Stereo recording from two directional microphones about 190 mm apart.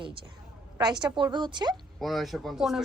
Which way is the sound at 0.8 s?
20° right (ahead or behind).